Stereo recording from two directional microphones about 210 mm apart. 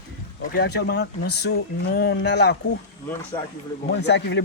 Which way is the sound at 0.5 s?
55° left (ahead or behind).